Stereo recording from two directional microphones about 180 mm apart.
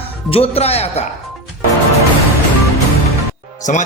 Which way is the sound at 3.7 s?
45° left (ahead or behind).